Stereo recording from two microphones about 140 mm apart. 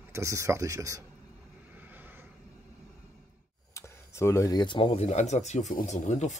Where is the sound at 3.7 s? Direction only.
20° left (ahead or behind).